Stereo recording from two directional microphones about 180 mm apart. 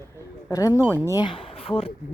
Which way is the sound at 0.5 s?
20° left (ahead or behind).